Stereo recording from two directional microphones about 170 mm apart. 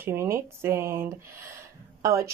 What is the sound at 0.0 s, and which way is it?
Speech, 15° right (ahead or behind).